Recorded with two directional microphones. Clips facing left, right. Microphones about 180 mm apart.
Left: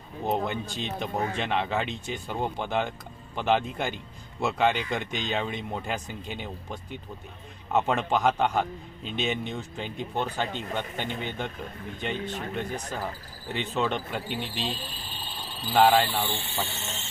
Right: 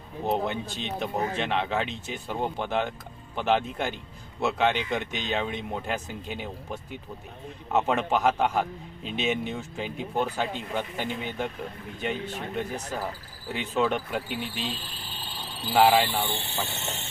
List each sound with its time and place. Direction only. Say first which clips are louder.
0.3 s speech: right 1 dB; centre (ahead or behind)
15.7 s speech: even; 5° right (ahead or behind)
16.8 s speech: right 3 dB; 60° right (ahead or behind)